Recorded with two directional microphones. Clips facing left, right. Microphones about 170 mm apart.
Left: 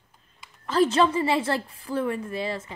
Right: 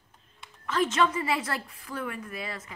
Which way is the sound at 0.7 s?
35° left (ahead or behind).